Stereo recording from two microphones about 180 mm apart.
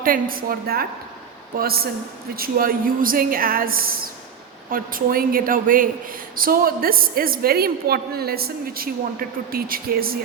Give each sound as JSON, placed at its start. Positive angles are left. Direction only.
{"t": 0.0, "sound": "a woman's voice", "side_deg": -50}